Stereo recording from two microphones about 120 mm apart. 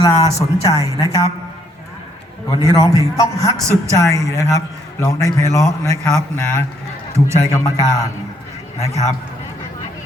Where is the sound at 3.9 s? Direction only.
25° left (ahead or behind).